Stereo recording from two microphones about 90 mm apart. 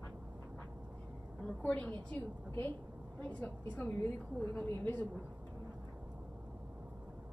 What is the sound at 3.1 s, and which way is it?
A woman's voice, 15° left (ahead or behind).